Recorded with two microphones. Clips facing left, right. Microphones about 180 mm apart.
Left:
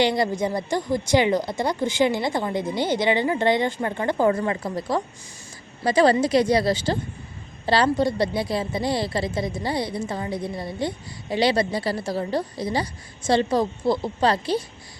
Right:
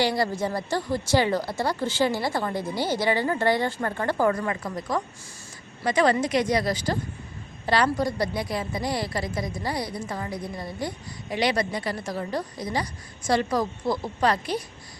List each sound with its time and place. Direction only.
0.0 s a woman's voice: 20° left (ahead or behind)